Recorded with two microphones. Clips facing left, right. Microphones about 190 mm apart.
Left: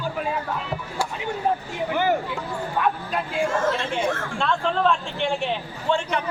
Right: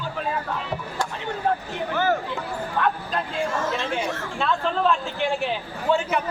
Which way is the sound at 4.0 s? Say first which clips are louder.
Left 3 dB; 50° left (ahead or behind).